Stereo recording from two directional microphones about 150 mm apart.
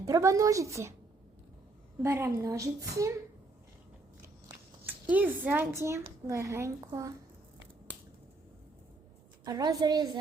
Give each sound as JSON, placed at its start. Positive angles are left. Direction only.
{"t": 0.0, "sound": "a woman's voice", "side_deg": -20}
{"t": 2.0, "sound": "a woman's voice", "side_deg": -15}
{"t": 4.9, "sound": "a woman's voice", "side_deg": -10}
{"t": 9.4, "sound": "a woman's voice", "side_deg": -25}